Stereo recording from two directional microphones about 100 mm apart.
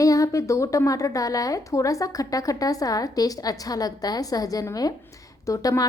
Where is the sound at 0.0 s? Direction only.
35° left (ahead or behind).